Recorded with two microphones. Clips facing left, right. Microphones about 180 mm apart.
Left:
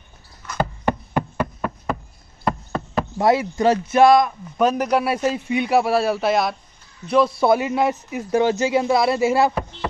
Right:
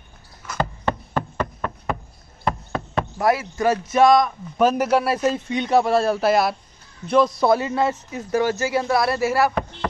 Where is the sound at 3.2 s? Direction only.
20° left (ahead or behind).